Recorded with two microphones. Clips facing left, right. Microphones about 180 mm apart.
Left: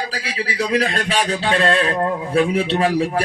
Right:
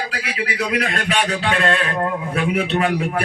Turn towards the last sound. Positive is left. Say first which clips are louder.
# left 2 dB
turn(degrees=30)  # may be behind; listen again after turning